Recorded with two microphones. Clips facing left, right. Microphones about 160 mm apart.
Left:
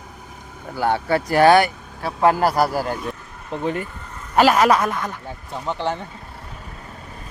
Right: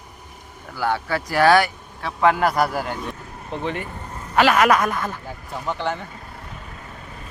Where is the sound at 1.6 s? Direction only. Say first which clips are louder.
Left 3 dB; 40° left (ahead or behind); by 5.1 s 25° left (ahead or behind).